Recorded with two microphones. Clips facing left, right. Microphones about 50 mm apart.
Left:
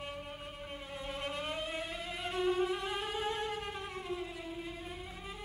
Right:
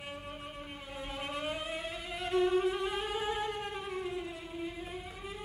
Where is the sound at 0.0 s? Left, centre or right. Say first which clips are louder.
Even; centre.